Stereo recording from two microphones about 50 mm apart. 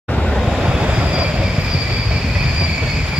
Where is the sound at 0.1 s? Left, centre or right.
Centre.